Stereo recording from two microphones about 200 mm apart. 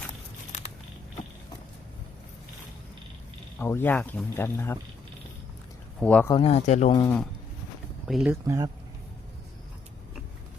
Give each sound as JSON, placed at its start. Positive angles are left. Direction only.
{"t": 3.6, "sound": "speech", "side_deg": 10}
{"t": 6.0, "sound": "speech", "side_deg": 5}
{"t": 6.3, "sound": "speech", "side_deg": 30}
{"t": 8.0, "sound": "speech", "side_deg": -5}
{"t": 8.4, "sound": "speech", "side_deg": -15}